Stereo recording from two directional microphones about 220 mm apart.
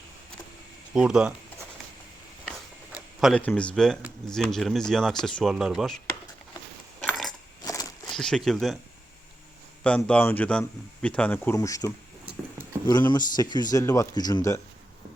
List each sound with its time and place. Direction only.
0.9 s speech: 5° right (ahead or behind)
2.4 s speech: centre (ahead or behind)
7.0 s coin: centre (ahead or behind)
7.6 s walk: 15° left (ahead or behind)
8.1 s speech: 5° left (ahead or behind)
9.8 s speech: 5° left (ahead or behind)
12.9 s speech: 20° left (ahead or behind)